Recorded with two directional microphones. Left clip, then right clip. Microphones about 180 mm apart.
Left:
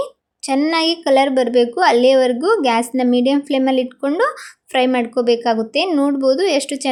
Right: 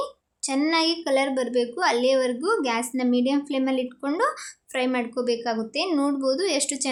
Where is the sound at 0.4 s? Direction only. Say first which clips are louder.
Left 6 dB; 25° left (ahead or behind).